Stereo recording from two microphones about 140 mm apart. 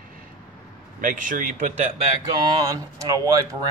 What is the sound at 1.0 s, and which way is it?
Speech, 70° right (ahead or behind).